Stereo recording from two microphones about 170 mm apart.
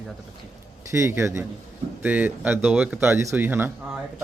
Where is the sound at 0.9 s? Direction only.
15° right (ahead or behind).